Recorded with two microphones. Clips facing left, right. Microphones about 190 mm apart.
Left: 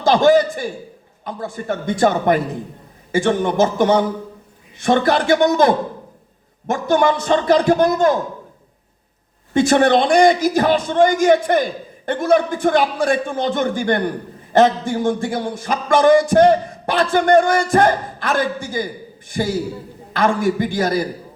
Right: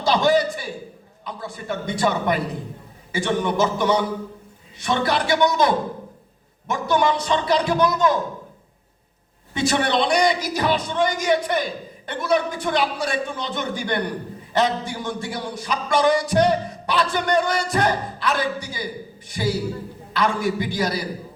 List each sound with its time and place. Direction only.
0.0 s a man's voice: 50° left (ahead or behind)
9.5 s a man's voice: 50° left (ahead or behind)